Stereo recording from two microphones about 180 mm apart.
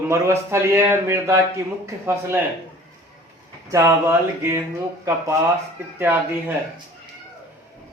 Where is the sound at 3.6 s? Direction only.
15° right (ahead or behind).